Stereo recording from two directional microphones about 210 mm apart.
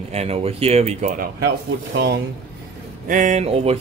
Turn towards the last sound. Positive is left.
turn(degrees=-30)  # may be behind; listen again after turning